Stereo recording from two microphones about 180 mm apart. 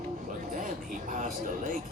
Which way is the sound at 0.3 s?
45° right (ahead or behind).